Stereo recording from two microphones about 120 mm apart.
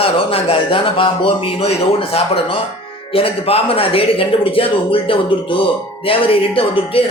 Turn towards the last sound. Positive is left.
turn(degrees=50)  # may be behind; listen again after turning